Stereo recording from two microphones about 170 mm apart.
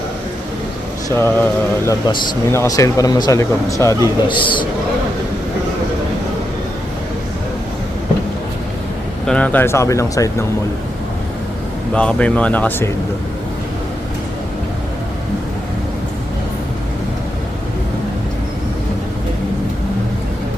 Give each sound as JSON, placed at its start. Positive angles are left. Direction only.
{"t": 1.1, "sound": "speech", "side_deg": 15}
{"t": 4.3, "sound": "speech", "side_deg": 30}
{"t": 9.2, "sound": "speech", "side_deg": 5}
{"t": 11.9, "sound": "speech", "side_deg": 5}